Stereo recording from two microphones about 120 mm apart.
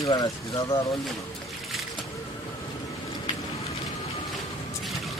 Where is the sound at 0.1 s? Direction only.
30° left (ahead or behind).